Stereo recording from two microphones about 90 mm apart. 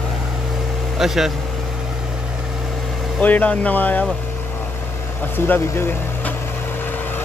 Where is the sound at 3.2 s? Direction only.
15° left (ahead or behind).